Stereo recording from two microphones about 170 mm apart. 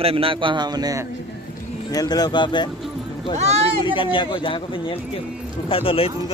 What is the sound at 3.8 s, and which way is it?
Speech, 30° left (ahead or behind).